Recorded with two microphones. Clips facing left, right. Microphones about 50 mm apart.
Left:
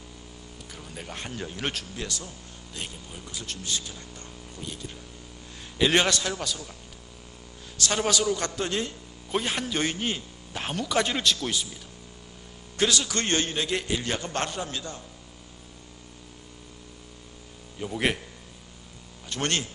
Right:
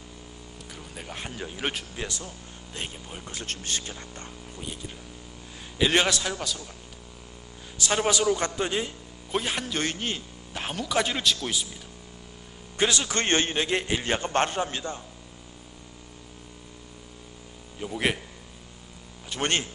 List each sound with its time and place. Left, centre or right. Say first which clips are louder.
0.8 s speech: even; centre
2.0 s a man's voice: right 1 dB; right
3.3 s a man's voice: even; right
4.5 s speech: even; centre
5.8 s speech: even; centre
7.8 s a man's voice: right 1 dB; centre
9.3 s speech: left 1 dB; centre
12.7 s a man's voice: even; right
17.7 s speech: even; centre
19.4 s a man's voice: right 1 dB; right